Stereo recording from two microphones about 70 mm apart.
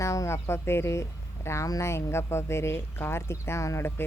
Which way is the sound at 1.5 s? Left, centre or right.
Left.